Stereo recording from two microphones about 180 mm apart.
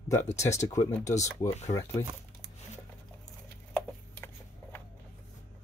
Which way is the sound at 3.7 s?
15° left (ahead or behind).